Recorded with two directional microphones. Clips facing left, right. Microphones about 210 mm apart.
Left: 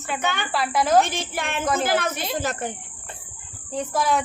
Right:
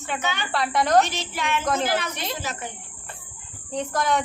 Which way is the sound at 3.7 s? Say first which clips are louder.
Left 1 dB; 5° left (ahead or behind).